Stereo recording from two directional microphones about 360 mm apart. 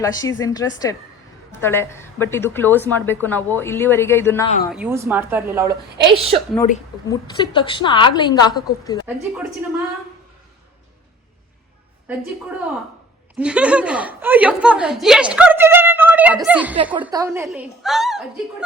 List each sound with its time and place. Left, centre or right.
0.0 s a woman's voice: centre
4.4 s a woman's voice: centre
4.7 s a woman's voice: centre
7.1 s a woman's voice: centre
9.0 s a woman's voice: centre
13.4 s a woman's voice: centre